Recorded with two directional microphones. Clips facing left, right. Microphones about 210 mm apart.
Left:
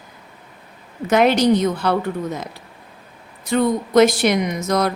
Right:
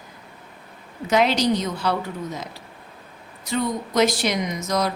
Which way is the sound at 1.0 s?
55° left (ahead or behind).